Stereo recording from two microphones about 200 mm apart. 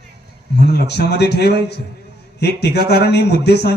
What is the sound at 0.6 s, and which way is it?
Speech, 55° left (ahead or behind).